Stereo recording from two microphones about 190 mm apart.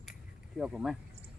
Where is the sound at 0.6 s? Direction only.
5° right (ahead or behind).